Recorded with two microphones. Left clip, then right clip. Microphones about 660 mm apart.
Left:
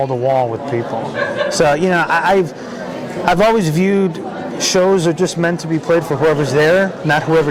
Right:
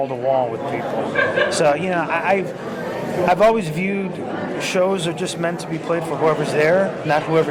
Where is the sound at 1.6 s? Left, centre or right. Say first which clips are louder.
Left 5 dB; left.